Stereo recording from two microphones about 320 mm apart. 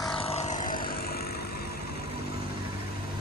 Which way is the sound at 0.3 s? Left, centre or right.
Centre.